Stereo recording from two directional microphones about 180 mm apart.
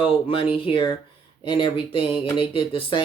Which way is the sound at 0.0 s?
30° left (ahead or behind).